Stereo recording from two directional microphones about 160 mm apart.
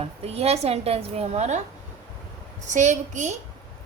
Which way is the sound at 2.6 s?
50° right (ahead or behind).